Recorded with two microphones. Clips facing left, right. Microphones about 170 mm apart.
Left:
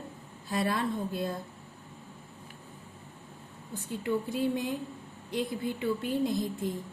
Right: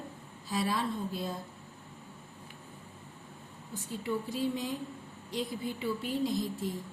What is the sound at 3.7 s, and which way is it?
A woman's voice, 55° left (ahead or behind).